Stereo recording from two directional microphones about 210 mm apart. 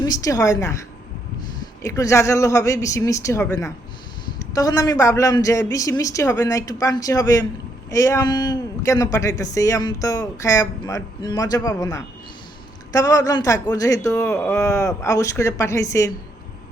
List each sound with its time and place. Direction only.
0.0 s a man's voice: 15° left (ahead or behind)
1.8 s a man's voice: 15° left (ahead or behind)